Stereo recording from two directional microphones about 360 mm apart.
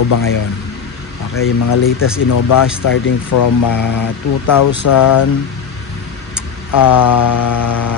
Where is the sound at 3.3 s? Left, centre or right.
Left.